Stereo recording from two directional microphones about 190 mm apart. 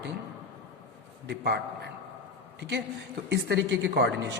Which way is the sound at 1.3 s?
60° right (ahead or behind).